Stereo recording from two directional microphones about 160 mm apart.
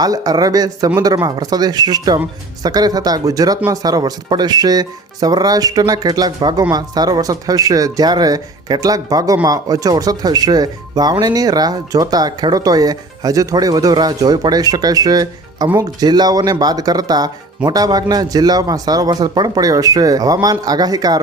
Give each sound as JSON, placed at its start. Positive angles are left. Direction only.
{"t": 0.0, "sound": "speech", "side_deg": -25}